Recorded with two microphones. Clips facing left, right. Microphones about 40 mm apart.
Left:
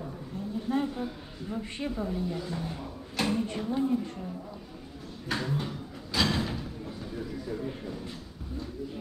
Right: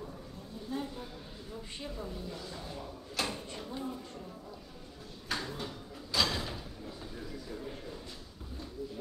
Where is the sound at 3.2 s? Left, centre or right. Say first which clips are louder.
Left 9 dB; left.